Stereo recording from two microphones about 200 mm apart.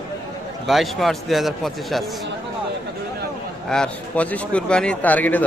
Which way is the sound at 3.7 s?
5° left (ahead or behind).